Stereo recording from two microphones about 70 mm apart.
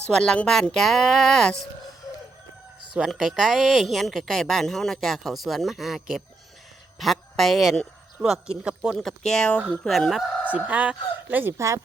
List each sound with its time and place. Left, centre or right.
0.1 s speech: centre
3.1 s speech: centre
9.0 s speech: centre
10.5 s speech: right
11.5 s speech: right